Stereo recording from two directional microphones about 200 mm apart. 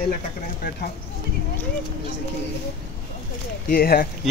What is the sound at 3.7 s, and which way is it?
Speech, 50° left (ahead or behind).